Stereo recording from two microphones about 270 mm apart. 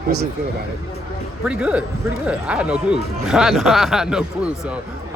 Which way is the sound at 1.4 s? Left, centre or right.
Centre.